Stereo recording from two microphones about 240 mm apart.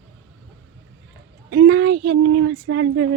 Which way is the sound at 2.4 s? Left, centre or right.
Right.